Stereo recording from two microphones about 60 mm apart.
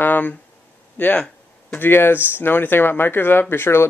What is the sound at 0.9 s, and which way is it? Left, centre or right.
Speech, left.